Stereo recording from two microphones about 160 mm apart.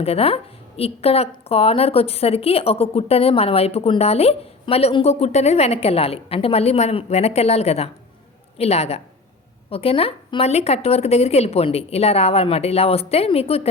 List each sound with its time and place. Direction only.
0.0 s a woman's voice: 40° left (ahead or behind)